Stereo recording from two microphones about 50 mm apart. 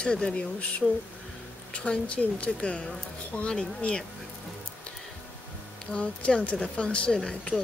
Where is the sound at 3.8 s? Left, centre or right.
Centre.